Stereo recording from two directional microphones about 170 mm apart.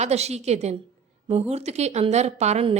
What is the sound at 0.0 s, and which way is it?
A woman's voice, 40° right (ahead or behind).